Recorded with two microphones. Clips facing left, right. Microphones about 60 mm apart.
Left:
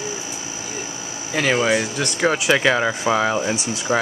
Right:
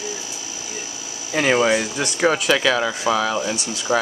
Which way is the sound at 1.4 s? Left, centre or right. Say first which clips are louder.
Right 1 dB; centre.